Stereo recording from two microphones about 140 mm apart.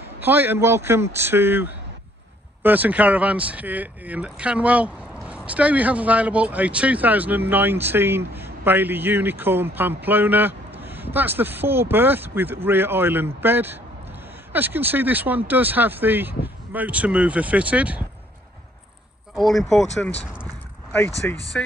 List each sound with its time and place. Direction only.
0.2 s speech: 15° right (ahead or behind)
19.3 s speech: centre (ahead or behind)
21.2 s speech: 15° left (ahead or behind)